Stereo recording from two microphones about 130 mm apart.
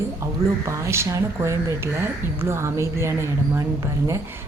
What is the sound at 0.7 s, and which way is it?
Speech, 20° right (ahead or behind).